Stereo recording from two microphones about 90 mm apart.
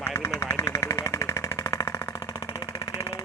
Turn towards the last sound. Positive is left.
turn(degrees=35)  # may be behind; listen again after turning